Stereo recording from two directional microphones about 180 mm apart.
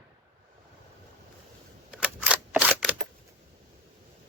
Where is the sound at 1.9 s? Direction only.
5° right (ahead or behind).